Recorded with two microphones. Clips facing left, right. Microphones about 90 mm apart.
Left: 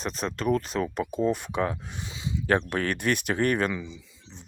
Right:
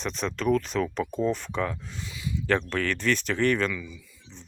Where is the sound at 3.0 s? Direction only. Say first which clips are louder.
Right 1 dB; 15° left (ahead or behind).